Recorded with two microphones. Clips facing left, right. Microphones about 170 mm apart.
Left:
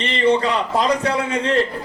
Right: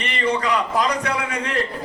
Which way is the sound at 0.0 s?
30° left (ahead or behind).